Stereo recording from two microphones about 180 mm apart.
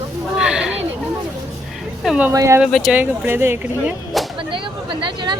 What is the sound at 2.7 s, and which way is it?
Speech, centre (ahead or behind).